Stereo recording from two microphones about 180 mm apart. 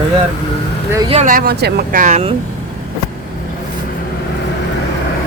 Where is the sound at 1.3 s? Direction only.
60° right (ahead or behind).